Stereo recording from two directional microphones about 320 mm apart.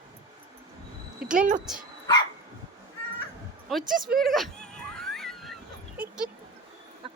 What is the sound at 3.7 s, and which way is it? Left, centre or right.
Speech, centre.